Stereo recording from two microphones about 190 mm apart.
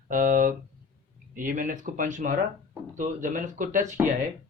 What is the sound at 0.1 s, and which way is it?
Speech, 45° right (ahead or behind).